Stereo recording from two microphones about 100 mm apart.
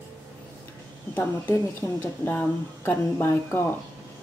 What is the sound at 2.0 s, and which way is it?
A woman's voice, 20° left (ahead or behind).